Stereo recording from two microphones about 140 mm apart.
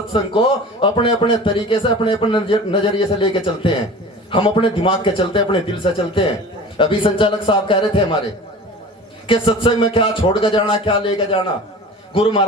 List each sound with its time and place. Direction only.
0.1 s a man's voice: 40° left (ahead or behind)
9.2 s a man's voice: 40° left (ahead or behind)